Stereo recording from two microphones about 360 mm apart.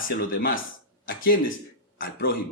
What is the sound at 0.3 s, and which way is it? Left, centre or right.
Speech, left.